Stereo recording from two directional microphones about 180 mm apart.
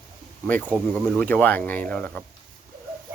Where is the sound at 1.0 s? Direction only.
5° left (ahead or behind).